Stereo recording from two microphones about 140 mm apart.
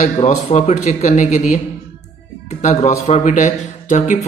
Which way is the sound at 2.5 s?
55° left (ahead or behind).